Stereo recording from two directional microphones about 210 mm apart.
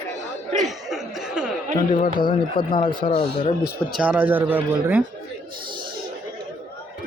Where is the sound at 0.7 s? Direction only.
Centre (ahead or behind).